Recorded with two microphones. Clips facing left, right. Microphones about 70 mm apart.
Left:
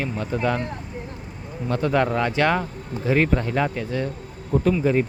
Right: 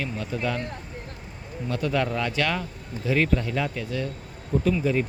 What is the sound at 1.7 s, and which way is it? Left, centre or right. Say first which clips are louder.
Speech: left 5 dB; left.